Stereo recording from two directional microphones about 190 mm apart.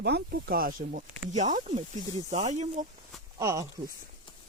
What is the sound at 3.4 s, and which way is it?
Speech, 15° right (ahead or behind).